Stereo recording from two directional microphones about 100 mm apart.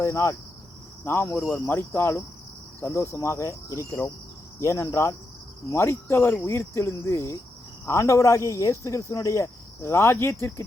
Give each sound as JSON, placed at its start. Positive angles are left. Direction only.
{"t": 0.0, "sound": "speech", "side_deg": 30}